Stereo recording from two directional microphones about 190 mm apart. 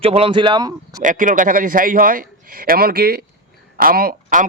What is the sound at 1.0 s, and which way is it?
A man's voice, 45° right (ahead or behind).